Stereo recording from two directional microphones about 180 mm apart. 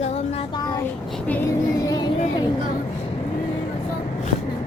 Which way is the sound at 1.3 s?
15° left (ahead or behind).